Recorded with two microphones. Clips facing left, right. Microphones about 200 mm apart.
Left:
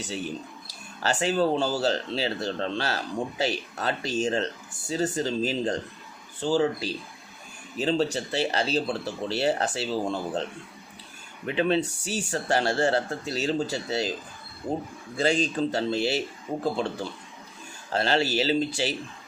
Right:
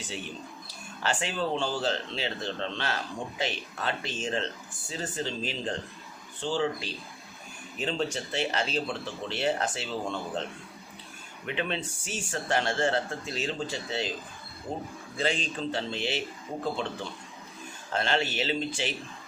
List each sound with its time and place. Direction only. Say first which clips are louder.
1.0 s speech: left 6 dB; 40° left (ahead or behind)
11.4 s speech: left 8 dB; 35° left (ahead or behind)
15.2 s speech: left 6 dB; 40° left (ahead or behind)
17.9 s speech: left 4 dB; 35° left (ahead or behind)